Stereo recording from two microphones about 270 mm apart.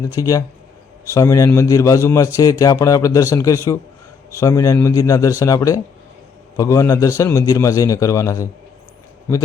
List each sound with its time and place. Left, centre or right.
0.0 s a man's voice: centre